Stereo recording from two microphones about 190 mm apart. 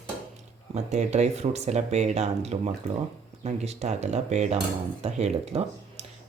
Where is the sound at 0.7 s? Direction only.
35° right (ahead or behind).